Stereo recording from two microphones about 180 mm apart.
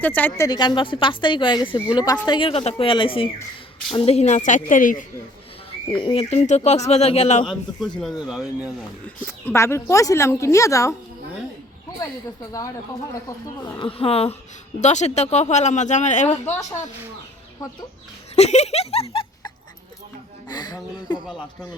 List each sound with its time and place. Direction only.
0.0 s a woman's voice: 10° left (ahead or behind); by 5.0 s 45° left (ahead or behind)
5.9 s speech: 30° left (ahead or behind)
7.4 s a man's voice: centre (ahead or behind)
9.2 s speech: 15° left (ahead or behind)
12.5 s a woman's voice: 20° left (ahead or behind); by 16.3 s 40° left (ahead or behind)
16.5 s speech: 20° left (ahead or behind)
18.3 s speech: 40° left (ahead or behind)
20.5 s a woman's voice: 25° left (ahead or behind)